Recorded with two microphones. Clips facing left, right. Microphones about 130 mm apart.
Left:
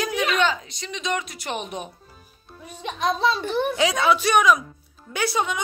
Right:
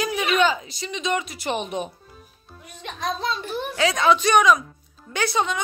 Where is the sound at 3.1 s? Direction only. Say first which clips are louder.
Left 5 dB; 80° left.